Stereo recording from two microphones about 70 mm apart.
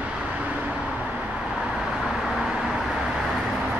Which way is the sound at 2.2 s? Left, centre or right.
Centre.